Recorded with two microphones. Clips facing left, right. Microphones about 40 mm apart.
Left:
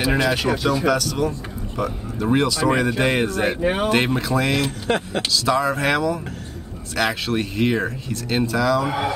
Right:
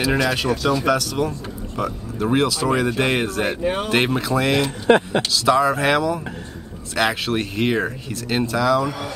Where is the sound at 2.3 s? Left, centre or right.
Centre.